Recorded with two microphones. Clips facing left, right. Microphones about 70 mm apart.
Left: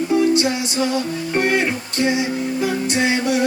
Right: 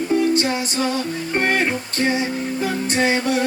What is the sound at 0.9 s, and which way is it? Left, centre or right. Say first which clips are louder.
Music: left 2 dB; right.